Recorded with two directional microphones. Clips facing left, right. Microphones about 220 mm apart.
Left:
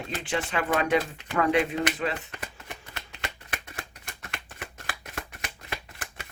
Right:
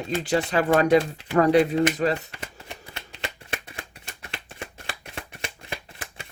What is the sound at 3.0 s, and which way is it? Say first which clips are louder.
Shuffling cards: right 4 dB; 25° right (ahead or behind).